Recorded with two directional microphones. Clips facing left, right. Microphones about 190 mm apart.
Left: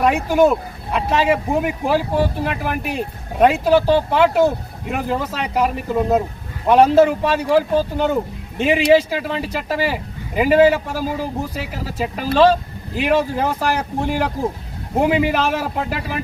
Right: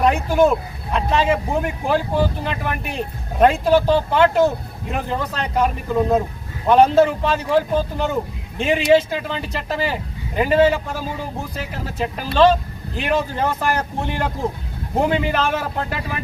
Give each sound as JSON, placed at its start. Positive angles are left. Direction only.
{"t": 0.0, "sound": "speech", "side_deg": 5}